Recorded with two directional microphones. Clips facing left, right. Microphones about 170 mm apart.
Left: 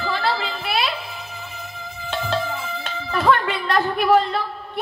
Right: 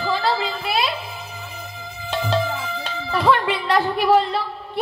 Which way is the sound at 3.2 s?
10° right (ahead or behind).